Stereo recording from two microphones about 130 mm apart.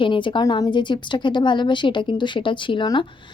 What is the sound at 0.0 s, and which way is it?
A woman's voice, 40° left (ahead or behind).